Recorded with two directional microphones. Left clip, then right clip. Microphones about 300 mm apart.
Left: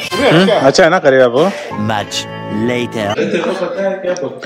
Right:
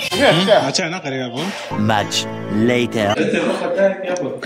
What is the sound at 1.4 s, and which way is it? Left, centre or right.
Speech, centre.